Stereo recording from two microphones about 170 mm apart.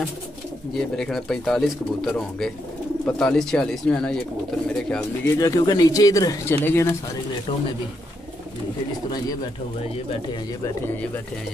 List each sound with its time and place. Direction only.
0.7 s speech: 5° left (ahead or behind)
5.2 s speech: 20° left (ahead or behind)